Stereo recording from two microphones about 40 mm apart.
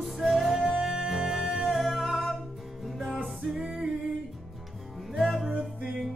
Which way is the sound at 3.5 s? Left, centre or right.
Centre.